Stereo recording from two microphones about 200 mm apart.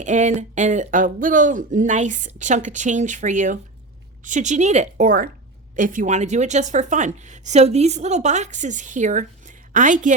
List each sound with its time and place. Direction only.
0.0 s speech: 35° right (ahead or behind)